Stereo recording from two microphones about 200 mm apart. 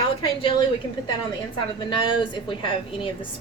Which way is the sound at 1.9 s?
25° left (ahead or behind).